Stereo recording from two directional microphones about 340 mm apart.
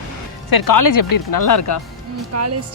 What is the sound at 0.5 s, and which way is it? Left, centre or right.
Speech, left.